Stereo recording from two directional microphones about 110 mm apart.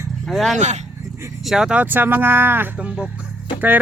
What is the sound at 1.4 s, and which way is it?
Speech, 5° right (ahead or behind).